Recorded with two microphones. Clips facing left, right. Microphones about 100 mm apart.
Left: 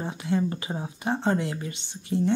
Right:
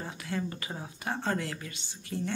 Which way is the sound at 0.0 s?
20° left (ahead or behind).